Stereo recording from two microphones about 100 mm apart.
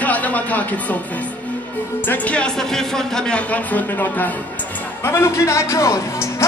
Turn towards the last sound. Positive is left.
turn(degrees=30)  # may be behind; listen again after turning